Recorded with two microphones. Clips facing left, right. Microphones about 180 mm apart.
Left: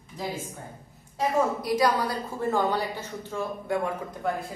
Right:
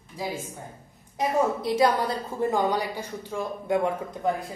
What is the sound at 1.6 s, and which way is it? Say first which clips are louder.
A woman's voice: right 2 dB; 25° right (ahead or behind).